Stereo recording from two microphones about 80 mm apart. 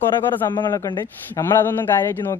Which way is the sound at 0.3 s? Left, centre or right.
Left.